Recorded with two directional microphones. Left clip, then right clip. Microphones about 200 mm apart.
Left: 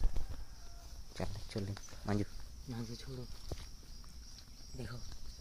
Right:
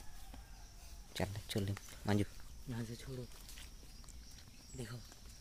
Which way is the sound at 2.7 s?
20° right (ahead or behind).